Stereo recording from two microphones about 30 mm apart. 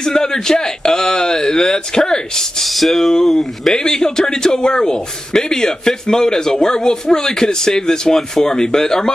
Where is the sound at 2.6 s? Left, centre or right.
Centre.